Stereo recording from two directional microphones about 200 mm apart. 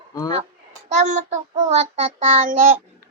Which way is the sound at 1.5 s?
30° right (ahead or behind).